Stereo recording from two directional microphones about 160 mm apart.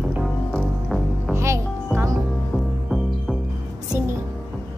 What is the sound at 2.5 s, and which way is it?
Music, centre (ahead or behind).